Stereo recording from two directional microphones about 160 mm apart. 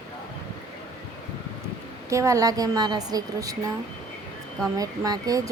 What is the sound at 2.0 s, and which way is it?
Speech, 20° right (ahead or behind).